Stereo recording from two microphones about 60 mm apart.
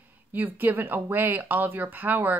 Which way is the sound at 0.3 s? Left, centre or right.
Right.